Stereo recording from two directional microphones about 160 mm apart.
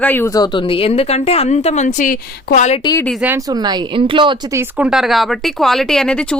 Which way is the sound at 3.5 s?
25° right (ahead or behind).